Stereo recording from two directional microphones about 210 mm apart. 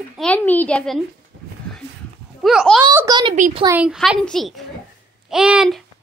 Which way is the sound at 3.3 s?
35° right (ahead or behind).